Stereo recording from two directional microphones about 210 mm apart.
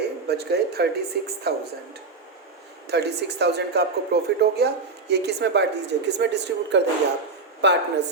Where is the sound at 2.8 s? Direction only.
50° right (ahead or behind).